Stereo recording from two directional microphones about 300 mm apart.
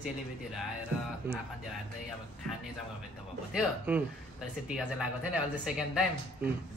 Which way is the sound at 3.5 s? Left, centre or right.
Centre.